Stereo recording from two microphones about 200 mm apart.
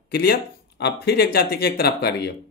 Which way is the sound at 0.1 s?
50° left (ahead or behind).